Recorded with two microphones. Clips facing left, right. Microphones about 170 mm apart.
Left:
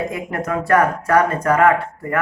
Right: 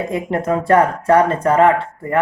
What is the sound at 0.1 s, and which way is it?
Speech, 25° right (ahead or behind).